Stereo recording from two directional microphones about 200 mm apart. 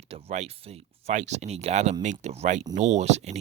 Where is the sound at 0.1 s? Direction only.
30° right (ahead or behind).